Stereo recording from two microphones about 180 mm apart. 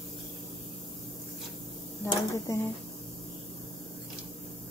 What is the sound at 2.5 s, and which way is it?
Speech, 15° left (ahead or behind).